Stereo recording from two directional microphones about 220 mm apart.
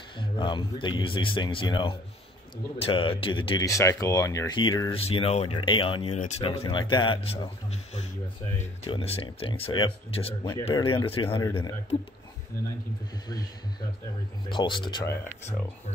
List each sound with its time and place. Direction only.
0.2 s speech: 20° left (ahead or behind)
6.7 s speech: 20° left (ahead or behind)
8.5 s speech: 25° left (ahead or behind)
13.3 s speech: 15° left (ahead or behind)